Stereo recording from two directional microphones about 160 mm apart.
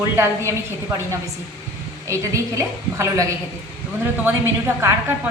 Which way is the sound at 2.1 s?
20° right (ahead or behind).